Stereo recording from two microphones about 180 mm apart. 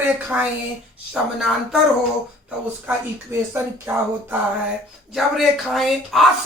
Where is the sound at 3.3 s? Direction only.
15° right (ahead or behind).